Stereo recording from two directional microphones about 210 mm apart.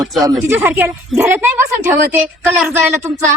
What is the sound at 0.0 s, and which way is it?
Speech, centre (ahead or behind).